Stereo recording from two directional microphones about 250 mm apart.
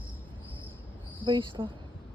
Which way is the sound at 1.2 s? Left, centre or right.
Centre.